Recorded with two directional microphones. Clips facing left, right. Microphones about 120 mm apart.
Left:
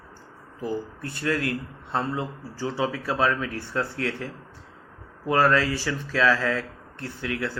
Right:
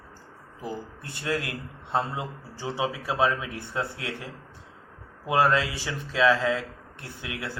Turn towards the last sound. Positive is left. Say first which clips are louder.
# left 6 dB
turn(degrees=-15)  # may be behind; listen again after turning